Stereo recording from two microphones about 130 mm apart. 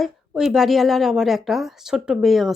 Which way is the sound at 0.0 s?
Centre (ahead or behind).